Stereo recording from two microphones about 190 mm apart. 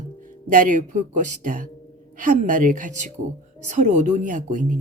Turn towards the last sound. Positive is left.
turn(degrees=-40)  # may be behind; listen again after turning